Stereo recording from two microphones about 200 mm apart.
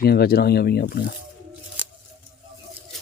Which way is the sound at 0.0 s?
50° left (ahead or behind).